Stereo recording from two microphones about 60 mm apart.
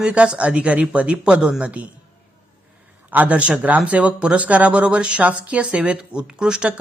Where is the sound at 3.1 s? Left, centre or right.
Right.